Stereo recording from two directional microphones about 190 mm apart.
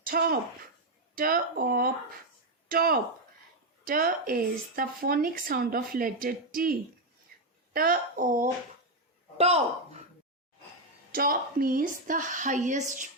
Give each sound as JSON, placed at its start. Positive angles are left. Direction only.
{"t": 0.0, "sound": "speech", "side_deg": -50}
{"t": 7.3, "sound": "a sound", "side_deg": -50}
{"t": 7.7, "sound": "speech", "side_deg": -50}
{"t": 9.4, "sound": "speech", "side_deg": -35}
{"t": 11.1, "sound": "speech", "side_deg": -50}